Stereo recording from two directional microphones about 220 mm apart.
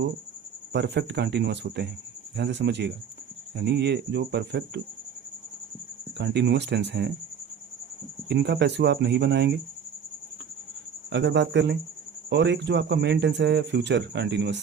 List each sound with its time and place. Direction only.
0.7 s speech: 50° right (ahead or behind)
6.1 s speech: 50° right (ahead or behind)
8.3 s speech: 50° right (ahead or behind)
11.1 s speech: 50° right (ahead or behind)